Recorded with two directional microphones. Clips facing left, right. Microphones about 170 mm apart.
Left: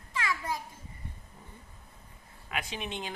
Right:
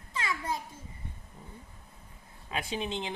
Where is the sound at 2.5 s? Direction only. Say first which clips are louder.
Right 3 dB; 30° right (ahead or behind).